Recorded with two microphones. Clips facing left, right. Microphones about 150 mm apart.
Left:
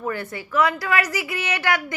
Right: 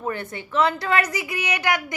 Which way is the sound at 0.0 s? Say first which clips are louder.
Left 1 dB; 20° right (ahead or behind).